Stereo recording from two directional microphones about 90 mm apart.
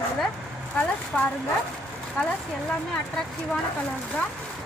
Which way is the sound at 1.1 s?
10° left (ahead or behind).